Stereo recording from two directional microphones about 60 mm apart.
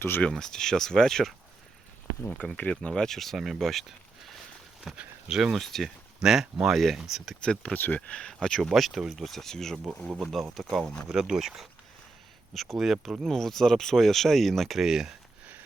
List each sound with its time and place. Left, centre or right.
0.2 s speech: centre
2.6 s speech: left
2.9 s speech: centre
5.3 s speech: centre
5.5 s speech: centre
6.2 s speech: centre
7.4 s speech: centre
7.8 s speech: left; by 8.7 s centre
8.7 s speech: centre
11.1 s speech: centre
14.8 s speech: centre